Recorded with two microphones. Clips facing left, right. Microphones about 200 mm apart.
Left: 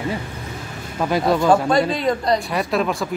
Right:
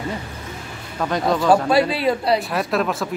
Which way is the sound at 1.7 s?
5° right (ahead or behind).